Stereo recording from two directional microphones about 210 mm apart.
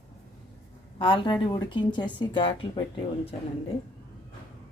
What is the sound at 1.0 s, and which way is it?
Speech, 25° left (ahead or behind).